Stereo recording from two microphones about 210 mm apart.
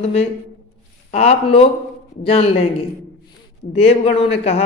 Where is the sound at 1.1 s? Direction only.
30° left (ahead or behind).